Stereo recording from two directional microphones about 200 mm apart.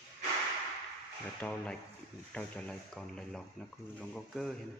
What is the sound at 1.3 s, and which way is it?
Speech, 5° left (ahead or behind).